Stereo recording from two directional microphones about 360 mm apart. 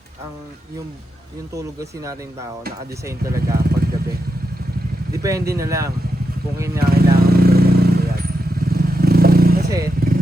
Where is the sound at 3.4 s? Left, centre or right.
Right.